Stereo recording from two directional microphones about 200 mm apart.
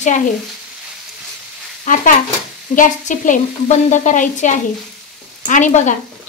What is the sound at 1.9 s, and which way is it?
A woman's voice, 40° left (ahead or behind).